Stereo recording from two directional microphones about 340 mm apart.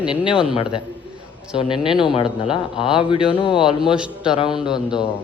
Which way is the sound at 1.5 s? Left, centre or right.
Centre.